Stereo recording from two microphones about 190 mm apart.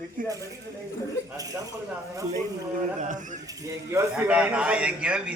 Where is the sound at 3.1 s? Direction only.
40° right (ahead or behind).